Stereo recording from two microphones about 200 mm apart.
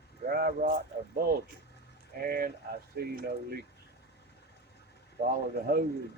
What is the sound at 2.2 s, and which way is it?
Speech, 45° right (ahead or behind).